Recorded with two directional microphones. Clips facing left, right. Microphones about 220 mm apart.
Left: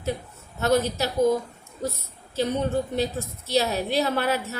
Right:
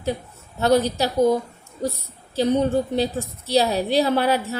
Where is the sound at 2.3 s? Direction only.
30° right (ahead or behind).